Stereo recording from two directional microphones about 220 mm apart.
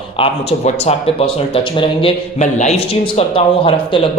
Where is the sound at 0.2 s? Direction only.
25° left (ahead or behind).